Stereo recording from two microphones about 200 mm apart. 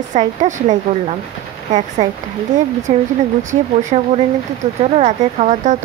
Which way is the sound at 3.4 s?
35° right (ahead or behind).